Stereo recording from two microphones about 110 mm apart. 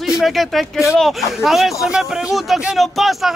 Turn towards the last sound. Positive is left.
turn(degrees=0)  # may be behind; listen again after turning